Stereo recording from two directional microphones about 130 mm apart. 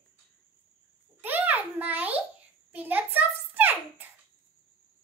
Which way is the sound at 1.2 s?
15° right (ahead or behind).